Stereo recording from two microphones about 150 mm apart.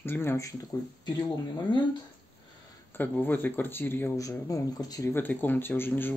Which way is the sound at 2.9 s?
15° left (ahead or behind).